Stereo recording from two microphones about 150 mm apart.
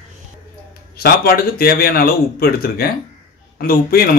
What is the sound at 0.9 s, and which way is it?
Speech, 90° left.